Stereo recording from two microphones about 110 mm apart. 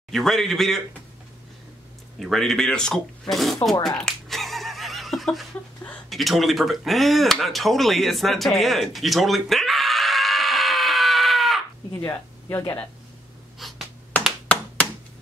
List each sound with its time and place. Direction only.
0.1 s speech: 5° left (ahead or behind)
2.1 s speech: centre (ahead or behind)
3.8 s neigh: 5° left (ahead or behind)
6.0 s speech: centre (ahead or behind)
12.0 s speech: 20° left (ahead or behind)
13.6 s a sound: centre (ahead or behind)
14.2 s clapping: 10° left (ahead or behind)